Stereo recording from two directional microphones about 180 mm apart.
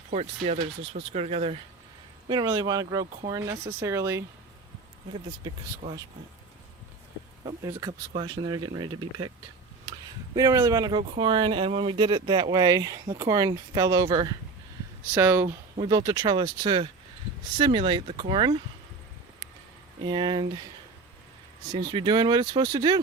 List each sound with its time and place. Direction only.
0.1 s speech: 35° right (ahead or behind)
2.2 s speech: 25° right (ahead or behind)
7.4 s speech: 20° right (ahead or behind)
10.3 s speech: 20° right (ahead or behind)
15.8 s speech: 25° right (ahead or behind)
20.1 s speech: 25° right (ahead or behind)
21.7 s speech: 25° right (ahead or behind)